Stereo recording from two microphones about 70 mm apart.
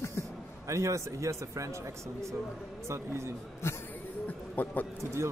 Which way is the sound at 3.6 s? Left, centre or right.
Left.